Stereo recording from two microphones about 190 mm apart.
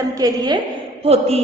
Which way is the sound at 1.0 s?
30° right (ahead or behind).